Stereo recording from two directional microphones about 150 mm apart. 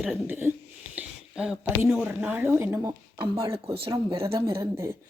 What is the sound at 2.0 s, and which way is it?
Speech, 15° right (ahead or behind).